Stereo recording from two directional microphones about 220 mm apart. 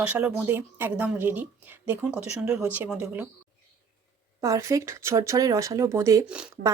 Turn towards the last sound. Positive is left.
turn(degrees=-10)  # may be behind; listen again after turning